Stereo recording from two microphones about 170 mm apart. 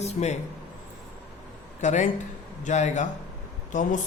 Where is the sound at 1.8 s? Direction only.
45° left (ahead or behind).